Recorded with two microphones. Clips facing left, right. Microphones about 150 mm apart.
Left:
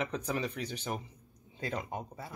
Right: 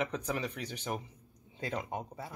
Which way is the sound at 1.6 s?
20° right (ahead or behind).